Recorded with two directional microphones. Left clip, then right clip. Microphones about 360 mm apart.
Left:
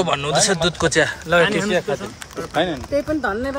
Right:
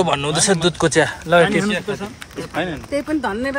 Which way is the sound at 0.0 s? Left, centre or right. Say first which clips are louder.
Even; centre.